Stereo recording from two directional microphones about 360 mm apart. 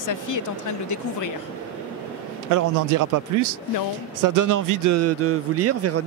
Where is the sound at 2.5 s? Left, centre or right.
Right.